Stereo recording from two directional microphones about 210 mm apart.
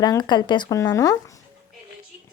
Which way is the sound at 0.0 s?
20° left (ahead or behind).